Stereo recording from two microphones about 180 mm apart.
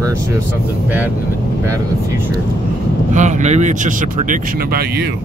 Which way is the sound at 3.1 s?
40° right (ahead or behind).